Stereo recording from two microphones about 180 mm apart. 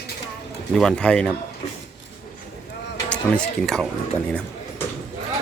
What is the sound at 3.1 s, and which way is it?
Speech, 5° left (ahead or behind).